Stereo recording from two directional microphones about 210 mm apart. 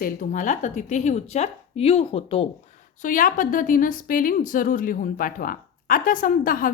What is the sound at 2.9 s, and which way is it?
A woman's voice, 40° left (ahead or behind).